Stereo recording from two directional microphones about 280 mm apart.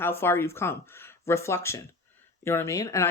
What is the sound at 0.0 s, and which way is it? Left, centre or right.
Speech, centre.